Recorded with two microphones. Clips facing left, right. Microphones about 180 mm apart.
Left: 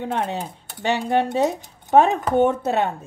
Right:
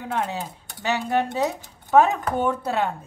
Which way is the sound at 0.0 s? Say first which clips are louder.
Left 2 dB; 20° left (ahead or behind).